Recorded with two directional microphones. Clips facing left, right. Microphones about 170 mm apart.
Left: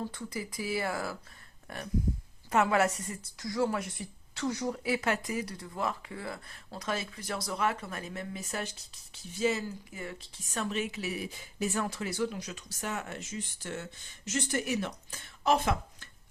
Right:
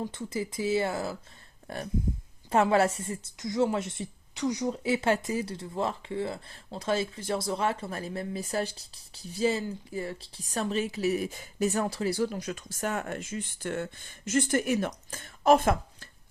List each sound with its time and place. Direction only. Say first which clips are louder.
0.0 s a woman's voice: right 4 dB; 20° right (ahead or behind)
1.6 s a sound: right 5 dB; 35° right (ahead or behind)
2.5 s a woman's voice: right 3 dB; 30° right (ahead or behind)
12.4 s speech: right 6 dB; 50° right (ahead or behind)